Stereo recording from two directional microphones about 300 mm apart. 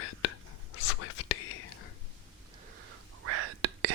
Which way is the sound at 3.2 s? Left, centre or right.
Right.